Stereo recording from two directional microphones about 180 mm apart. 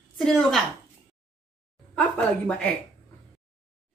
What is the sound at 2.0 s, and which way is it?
Speech, 5° left (ahead or behind).